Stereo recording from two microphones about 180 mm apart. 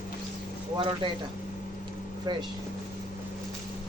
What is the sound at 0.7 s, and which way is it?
Speech, 25° right (ahead or behind).